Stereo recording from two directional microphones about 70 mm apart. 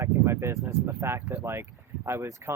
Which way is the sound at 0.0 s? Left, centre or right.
Right.